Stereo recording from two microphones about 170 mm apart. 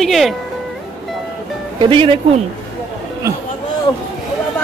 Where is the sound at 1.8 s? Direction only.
30° right (ahead or behind).